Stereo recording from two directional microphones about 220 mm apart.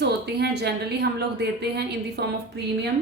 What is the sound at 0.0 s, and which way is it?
A woman's voice, 50° right (ahead or behind).